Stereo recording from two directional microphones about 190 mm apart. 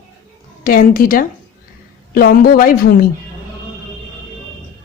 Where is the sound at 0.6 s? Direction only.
50° left (ahead or behind).